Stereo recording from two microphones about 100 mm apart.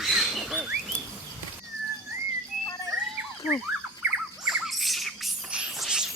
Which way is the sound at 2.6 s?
35° left (ahead or behind).